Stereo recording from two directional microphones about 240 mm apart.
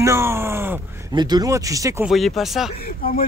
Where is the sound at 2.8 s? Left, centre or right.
Left.